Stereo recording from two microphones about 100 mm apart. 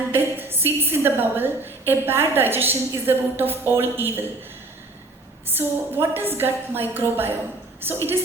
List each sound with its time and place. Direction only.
0.1 s a sound: 20° right (ahead or behind)
1.9 s a woman's voice: 20° right (ahead or behind)
5.5 s a woman's voice: 20° right (ahead or behind)